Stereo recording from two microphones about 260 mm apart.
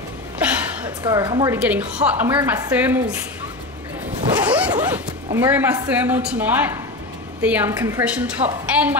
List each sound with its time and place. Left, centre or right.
0.4 s a woman's voice: centre
4.4 s speech: centre